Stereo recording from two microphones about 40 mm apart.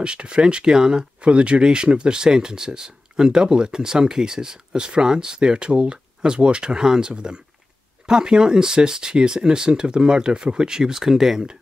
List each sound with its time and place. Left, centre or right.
0.0 s speech: right